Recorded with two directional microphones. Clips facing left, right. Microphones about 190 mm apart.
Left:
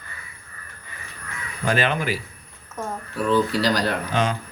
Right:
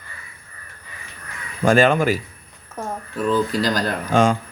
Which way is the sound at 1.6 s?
45° right (ahead or behind).